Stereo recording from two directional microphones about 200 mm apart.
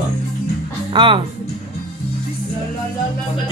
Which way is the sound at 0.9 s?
25° right (ahead or behind).